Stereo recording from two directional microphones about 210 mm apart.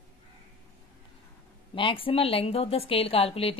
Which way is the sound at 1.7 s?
25° left (ahead or behind).